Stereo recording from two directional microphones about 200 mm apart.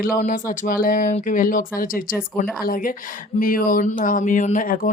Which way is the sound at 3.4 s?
45° left (ahead or behind).